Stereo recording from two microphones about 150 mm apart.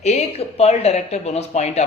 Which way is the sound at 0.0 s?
45° left (ahead or behind).